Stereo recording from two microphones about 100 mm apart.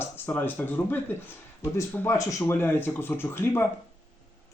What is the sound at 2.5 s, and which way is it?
Speech, 20° left (ahead or behind).